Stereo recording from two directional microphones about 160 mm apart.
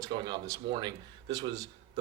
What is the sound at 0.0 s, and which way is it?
A man's voice, 30° right (ahead or behind).